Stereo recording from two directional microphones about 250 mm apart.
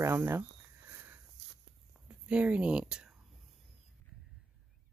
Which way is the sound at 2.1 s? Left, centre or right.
Centre.